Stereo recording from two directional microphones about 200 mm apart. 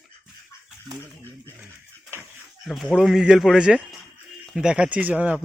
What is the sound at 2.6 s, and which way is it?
Speech, centre (ahead or behind).